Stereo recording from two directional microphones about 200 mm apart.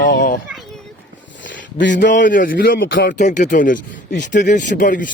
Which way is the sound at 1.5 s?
65° left (ahead or behind).